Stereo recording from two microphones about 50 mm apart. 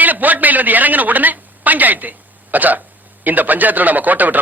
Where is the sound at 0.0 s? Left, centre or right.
Right.